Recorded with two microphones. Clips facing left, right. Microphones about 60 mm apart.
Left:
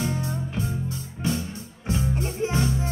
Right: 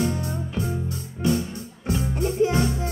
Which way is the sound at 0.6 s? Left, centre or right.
Right.